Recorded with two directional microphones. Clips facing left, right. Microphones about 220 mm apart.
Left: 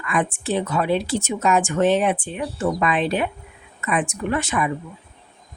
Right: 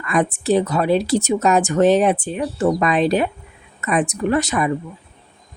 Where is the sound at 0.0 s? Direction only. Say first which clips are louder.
Right 4 dB; 40° right (ahead or behind).